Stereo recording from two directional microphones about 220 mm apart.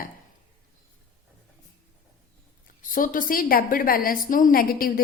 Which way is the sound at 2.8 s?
40° left (ahead or behind).